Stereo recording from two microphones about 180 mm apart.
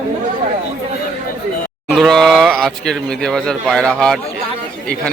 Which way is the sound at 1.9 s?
Centre (ahead or behind).